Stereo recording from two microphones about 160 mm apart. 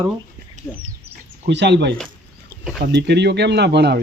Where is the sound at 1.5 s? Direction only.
90° right.